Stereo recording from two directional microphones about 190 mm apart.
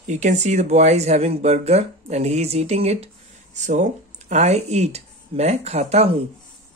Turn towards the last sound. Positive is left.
turn(degrees=-30)  # may be behind; listen again after turning